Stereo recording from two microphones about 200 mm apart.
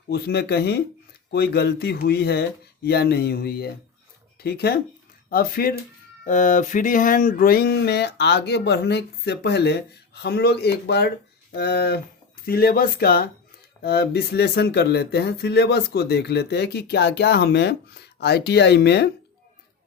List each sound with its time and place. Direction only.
0.1 s speech: 55° left (ahead or behind)